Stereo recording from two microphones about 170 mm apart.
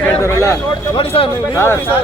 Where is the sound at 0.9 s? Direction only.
35° left (ahead or behind).